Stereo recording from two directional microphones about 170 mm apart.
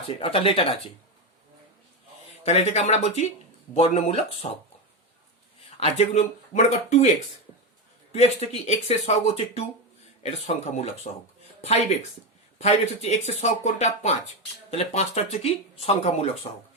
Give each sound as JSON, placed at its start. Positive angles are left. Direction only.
{"t": 0.2, "sound": "speech", "side_deg": 35}
{"t": 2.4, "sound": "speech", "side_deg": 40}
{"t": 5.8, "sound": "speech", "side_deg": 40}
{"t": 8.1, "sound": "speech", "side_deg": 40}
{"t": 12.5, "sound": "speech", "side_deg": 40}